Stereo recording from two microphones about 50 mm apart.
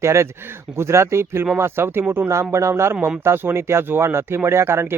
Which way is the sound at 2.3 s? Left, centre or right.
Right.